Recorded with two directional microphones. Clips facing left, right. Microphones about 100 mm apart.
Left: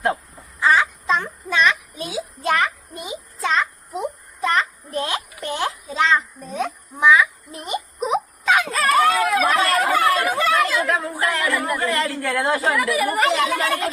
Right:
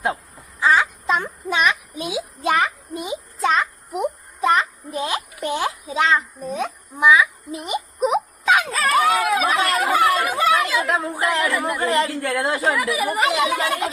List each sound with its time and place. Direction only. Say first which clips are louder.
0.7 s a child's voice: even; 10° right (ahead or behind)
3.4 s a sound: right 1 dB; 15° right (ahead or behind)
8.7 s speech: left 1 dB; centre (ahead or behind)
9.0 s speech: even; 10° right (ahead or behind)
10.9 s a woman's voice: right 1 dB; 20° right (ahead or behind)